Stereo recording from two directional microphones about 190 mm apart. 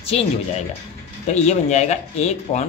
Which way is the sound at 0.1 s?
30° left (ahead or behind).